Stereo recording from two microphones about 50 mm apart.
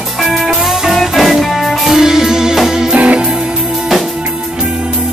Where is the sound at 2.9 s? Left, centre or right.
Right.